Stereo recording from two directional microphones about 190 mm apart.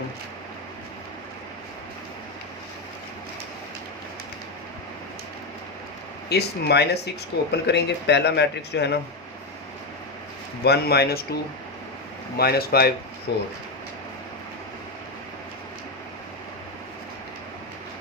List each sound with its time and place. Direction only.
6.2 s speech: 60° left (ahead or behind)
10.6 s speech: 55° left (ahead or behind)
12.4 s speech: 55° left (ahead or behind)